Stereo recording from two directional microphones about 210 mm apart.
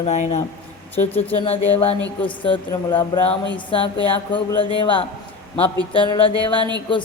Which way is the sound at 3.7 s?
25° left (ahead or behind).